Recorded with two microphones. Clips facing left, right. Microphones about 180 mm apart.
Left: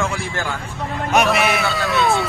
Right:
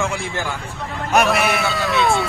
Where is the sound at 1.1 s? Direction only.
Centre (ahead or behind).